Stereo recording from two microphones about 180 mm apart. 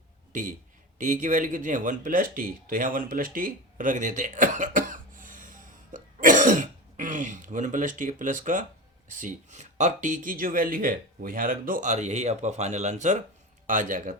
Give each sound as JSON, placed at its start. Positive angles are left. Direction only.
{"t": 0.9, "sound": "speech", "side_deg": -45}